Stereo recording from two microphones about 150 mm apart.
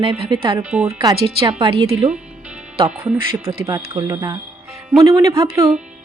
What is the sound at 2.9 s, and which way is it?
Speech, 10° right (ahead or behind).